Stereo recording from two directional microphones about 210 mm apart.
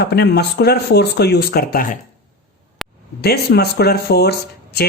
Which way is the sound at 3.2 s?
50° left (ahead or behind).